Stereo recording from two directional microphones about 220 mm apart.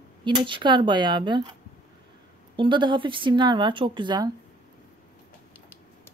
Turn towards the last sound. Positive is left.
turn(degrees=-20)  # may be behind; listen again after turning